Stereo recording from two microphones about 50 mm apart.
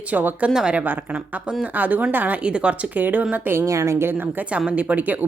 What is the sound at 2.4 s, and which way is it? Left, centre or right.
Speech, right.